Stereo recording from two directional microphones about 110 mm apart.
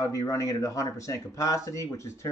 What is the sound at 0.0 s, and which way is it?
Speech, 30° left (ahead or behind).